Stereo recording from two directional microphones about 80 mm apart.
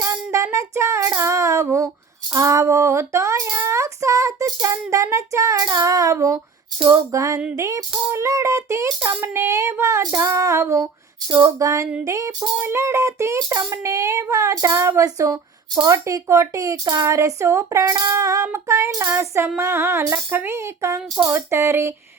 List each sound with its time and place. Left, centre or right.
0.3 s female singing: right
2.3 s music: right
3.6 s child singing: right
5.1 s speech: right
7.5 s child singing: right
11.4 s speech: right
12.5 s child singing: right
15.0 s speech: right
18.1 s child singing: right